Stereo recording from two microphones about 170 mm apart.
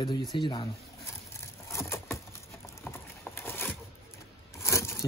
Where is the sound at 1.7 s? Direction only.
15° left (ahead or behind).